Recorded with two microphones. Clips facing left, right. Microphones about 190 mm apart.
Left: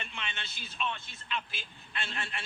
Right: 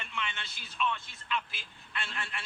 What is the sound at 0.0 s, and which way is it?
Speech, 25° left (ahead or behind).